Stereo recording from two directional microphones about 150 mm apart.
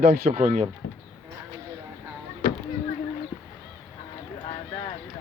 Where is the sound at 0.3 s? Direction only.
50° right (ahead or behind).